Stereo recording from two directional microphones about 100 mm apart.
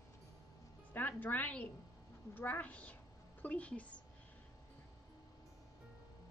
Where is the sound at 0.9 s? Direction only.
15° left (ahead or behind).